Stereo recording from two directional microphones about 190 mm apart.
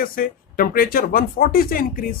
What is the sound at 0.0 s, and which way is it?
Speech, 50° left (ahead or behind).